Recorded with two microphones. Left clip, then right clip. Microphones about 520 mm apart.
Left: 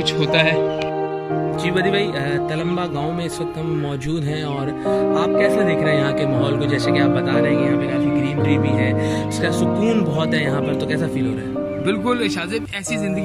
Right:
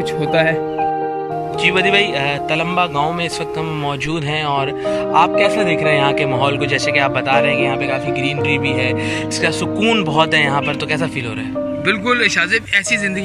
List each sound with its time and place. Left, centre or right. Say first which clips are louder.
0.3 s speech: right 2 dB; centre
1.6 s speech: right 8 dB; centre
4.9 s speech: right 4 dB; centre
11.9 s speech: right 7 dB; centre